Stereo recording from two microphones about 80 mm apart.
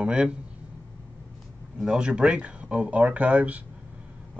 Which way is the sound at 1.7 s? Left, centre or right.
Centre.